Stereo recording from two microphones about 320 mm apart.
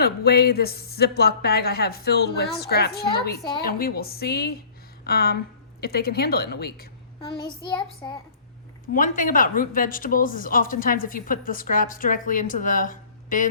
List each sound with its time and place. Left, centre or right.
0.0 s a woman's voice: left
7.2 s child singing: centre
8.9 s a woman's voice: left